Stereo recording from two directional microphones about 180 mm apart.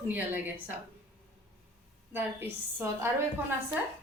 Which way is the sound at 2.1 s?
10° right (ahead or behind).